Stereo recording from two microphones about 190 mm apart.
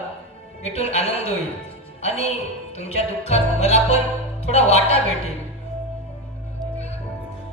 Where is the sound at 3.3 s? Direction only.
35° left (ahead or behind).